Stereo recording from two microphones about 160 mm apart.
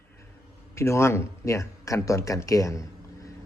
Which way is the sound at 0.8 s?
15° left (ahead or behind).